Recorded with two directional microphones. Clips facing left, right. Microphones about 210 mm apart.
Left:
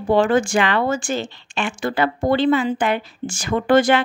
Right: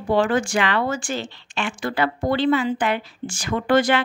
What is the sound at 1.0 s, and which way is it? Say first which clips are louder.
Speech: left 4 dB; 50° left (ahead or behind).